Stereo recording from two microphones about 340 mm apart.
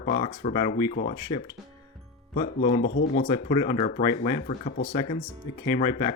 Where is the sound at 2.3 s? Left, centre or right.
Left.